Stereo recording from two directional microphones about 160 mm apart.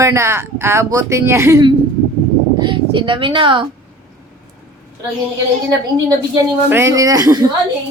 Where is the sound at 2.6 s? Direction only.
30° right (ahead or behind).